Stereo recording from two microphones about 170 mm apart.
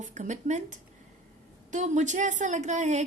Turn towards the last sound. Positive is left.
turn(degrees=-45)  # may be behind; listen again after turning